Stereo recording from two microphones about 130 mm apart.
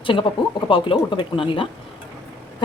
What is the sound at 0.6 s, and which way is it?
Speech, 40° left (ahead or behind).